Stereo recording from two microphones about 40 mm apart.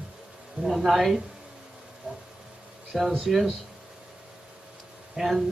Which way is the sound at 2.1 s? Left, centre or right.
Centre.